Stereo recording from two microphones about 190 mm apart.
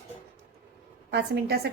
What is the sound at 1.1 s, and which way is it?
Speech, 60° right (ahead or behind).